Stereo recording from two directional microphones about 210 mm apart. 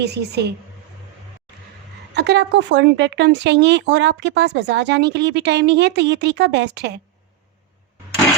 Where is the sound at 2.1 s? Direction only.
55° right (ahead or behind).